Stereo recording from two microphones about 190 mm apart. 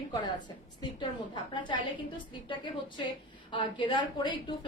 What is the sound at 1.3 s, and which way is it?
A woman's voice, 25° left (ahead or behind).